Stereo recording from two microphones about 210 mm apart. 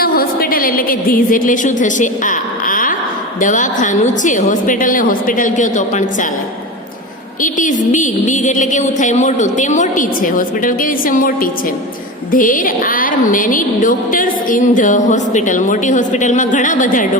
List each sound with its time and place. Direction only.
0.0 s a woman's voice: 45° left (ahead or behind)
7.4 s a woman's voice: 40° left (ahead or behind)